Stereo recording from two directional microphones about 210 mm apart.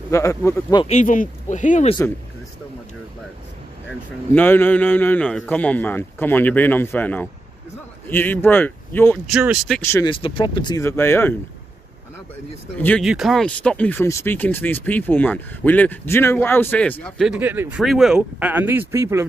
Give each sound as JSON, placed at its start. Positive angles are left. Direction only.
{"t": 0.1, "sound": "speech", "side_deg": 15}
{"t": 0.8, "sound": "speech", "side_deg": 35}
{"t": 4.3, "sound": "speech", "side_deg": 10}
{"t": 9.3, "sound": "speech", "side_deg": -5}
{"t": 9.8, "sound": "speech", "side_deg": 10}
{"t": 10.0, "sound": "speech", "side_deg": 25}
{"t": 12.7, "sound": "speech", "side_deg": 5}
{"t": 17.4, "sound": "speech", "side_deg": -10}